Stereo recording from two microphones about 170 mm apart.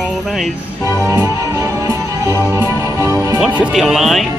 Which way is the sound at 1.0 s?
15° right (ahead or behind).